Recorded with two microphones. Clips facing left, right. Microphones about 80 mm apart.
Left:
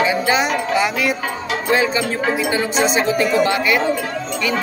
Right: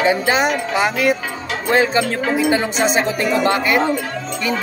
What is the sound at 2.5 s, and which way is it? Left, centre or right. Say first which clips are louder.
Speech: right 1 dB; right.